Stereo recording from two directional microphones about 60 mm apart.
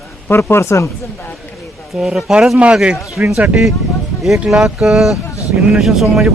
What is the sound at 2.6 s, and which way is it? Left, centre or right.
Speech, centre.